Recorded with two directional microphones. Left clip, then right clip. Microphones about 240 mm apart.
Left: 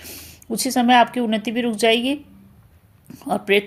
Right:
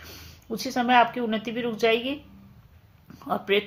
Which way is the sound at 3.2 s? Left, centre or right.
Left.